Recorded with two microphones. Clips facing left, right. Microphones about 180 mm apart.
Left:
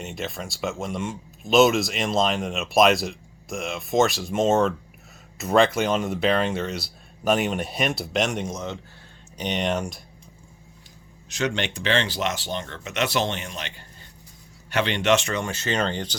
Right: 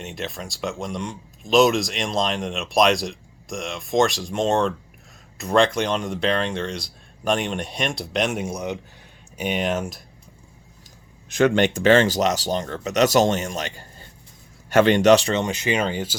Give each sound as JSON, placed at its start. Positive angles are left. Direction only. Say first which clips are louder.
{"t": 0.0, "sound": "speech", "louder": "even", "side_deg": 0}
{"t": 11.3, "sound": "speech", "louder": "right 9 dB", "side_deg": -50}